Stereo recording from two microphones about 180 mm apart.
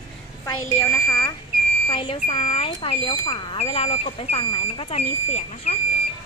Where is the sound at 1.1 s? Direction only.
15° left (ahead or behind).